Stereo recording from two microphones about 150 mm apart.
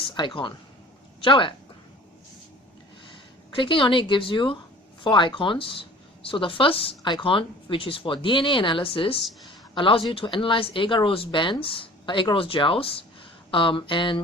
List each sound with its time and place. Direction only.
0.1 s speech: 30° left (ahead or behind)
3.5 s speech: 35° left (ahead or behind)